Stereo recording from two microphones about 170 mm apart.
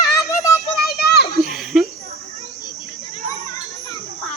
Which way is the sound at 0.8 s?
70° left (ahead or behind).